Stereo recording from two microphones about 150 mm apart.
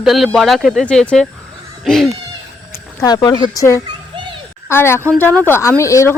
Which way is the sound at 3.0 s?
25° left (ahead or behind).